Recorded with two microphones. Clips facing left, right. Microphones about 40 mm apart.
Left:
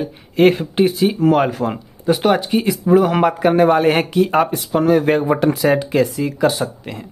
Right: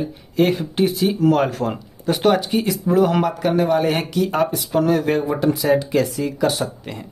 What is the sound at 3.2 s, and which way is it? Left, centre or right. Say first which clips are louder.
Speech: left 5 dB; left.